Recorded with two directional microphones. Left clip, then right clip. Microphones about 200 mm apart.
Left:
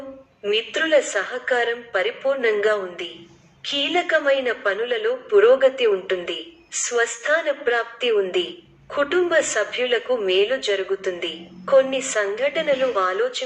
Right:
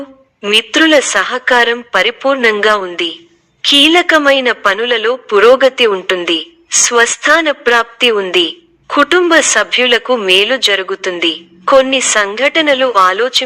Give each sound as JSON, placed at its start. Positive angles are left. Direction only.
{"t": 0.4, "sound": "a woman's voice", "side_deg": -45}